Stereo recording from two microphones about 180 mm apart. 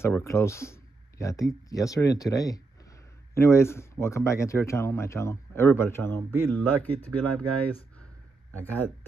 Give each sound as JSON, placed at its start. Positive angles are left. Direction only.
{"t": 0.0, "sound": "speech", "side_deg": 15}